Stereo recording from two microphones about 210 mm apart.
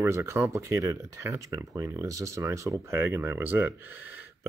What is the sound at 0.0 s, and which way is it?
Speech, 15° right (ahead or behind).